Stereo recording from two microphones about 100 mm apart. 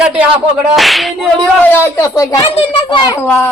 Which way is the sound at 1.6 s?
25° left (ahead or behind).